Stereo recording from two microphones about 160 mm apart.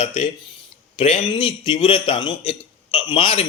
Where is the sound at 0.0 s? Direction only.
45° left (ahead or behind).